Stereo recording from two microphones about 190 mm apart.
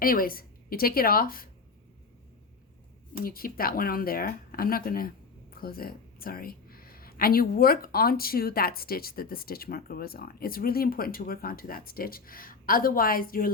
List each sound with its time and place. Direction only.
0.0 s speech: 50° left (ahead or behind)
3.2 s speech: 50° left (ahead or behind)